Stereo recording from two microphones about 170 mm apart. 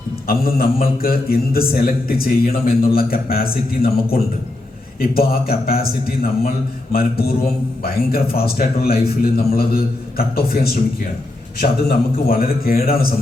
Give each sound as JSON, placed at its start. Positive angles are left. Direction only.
{"t": 0.3, "sound": "a man's voice", "side_deg": 60}
{"t": 8.4, "sound": "a man's voice", "side_deg": 65}